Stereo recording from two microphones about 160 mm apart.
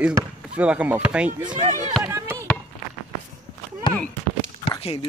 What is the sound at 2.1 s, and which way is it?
Chop, 20° right (ahead or behind).